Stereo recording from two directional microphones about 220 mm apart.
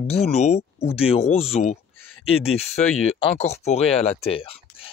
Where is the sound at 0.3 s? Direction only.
30° left (ahead or behind).